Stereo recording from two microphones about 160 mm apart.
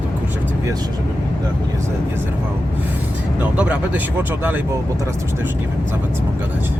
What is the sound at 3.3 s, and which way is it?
Speech, 10° right (ahead or behind).